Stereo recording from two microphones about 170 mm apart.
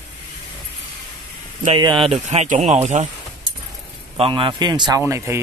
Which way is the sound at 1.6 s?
30° right (ahead or behind).